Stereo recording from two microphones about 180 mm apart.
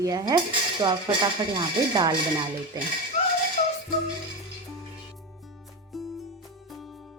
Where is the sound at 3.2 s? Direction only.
35° left (ahead or behind).